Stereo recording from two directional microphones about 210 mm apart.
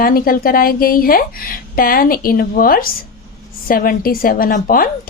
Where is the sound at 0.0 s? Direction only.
45° left (ahead or behind).